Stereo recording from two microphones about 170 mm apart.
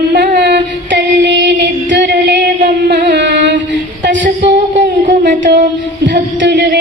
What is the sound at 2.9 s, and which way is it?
Music, 80° right.